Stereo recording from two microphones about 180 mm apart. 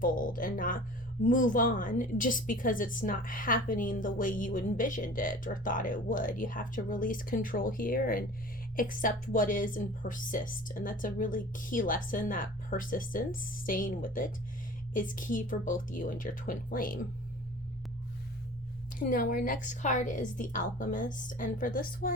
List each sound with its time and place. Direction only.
0.0 s a woman's voice: 50° left (ahead or behind)
18.9 s a woman's voice: 50° left (ahead or behind)